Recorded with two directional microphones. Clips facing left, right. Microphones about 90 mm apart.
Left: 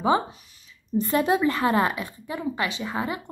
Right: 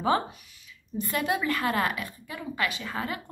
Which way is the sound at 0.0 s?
20° left (ahead or behind).